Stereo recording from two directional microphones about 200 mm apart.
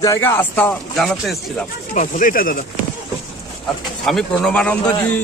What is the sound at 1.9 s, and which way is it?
Speech, 40° left (ahead or behind).